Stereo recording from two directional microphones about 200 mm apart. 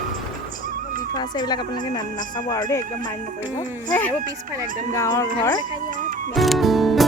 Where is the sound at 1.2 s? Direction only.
20° left (ahead or behind).